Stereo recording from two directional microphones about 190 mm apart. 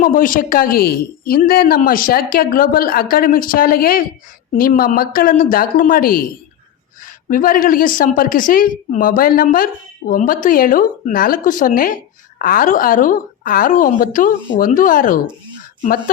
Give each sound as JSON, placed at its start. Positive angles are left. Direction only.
{"t": 0.0, "sound": "a woman's voice", "side_deg": 45}